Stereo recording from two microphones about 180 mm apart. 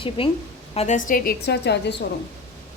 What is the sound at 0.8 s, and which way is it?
A woman's voice, 45° left (ahead or behind).